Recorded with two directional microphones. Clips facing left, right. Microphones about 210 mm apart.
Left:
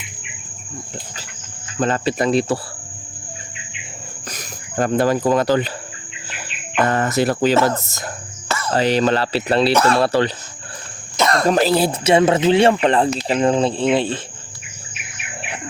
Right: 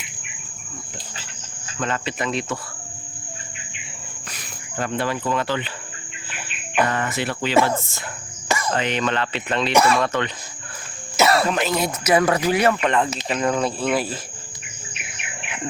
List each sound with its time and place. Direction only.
1.8 s speech: 35° left (ahead or behind)
4.3 s speech: 40° left (ahead or behind)
6.8 s speech: 40° left (ahead or behind)
8.4 s cricket: 15° right (ahead or behind)
8.7 s speech: 35° left (ahead or behind)
9.7 s speech: 10° right (ahead or behind)
10.0 s speech: 35° left (ahead or behind)
11.2 s a sound: 5° right (ahead or behind)
11.4 s speech: 35° left (ahead or behind)